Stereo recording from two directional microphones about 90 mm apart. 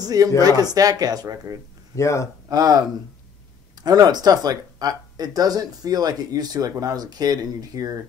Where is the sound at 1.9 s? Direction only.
35° left (ahead or behind).